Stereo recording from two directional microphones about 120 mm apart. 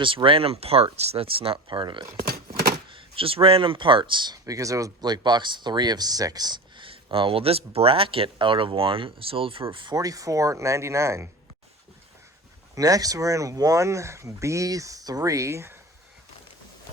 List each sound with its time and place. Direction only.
0.0 s speech: 45° right (ahead or behind)
9.7 s speech: 35° right (ahead or behind)
12.7 s speech: 30° right (ahead or behind)